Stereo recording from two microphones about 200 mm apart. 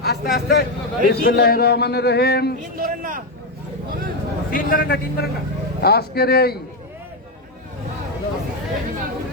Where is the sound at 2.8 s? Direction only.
40° right (ahead or behind).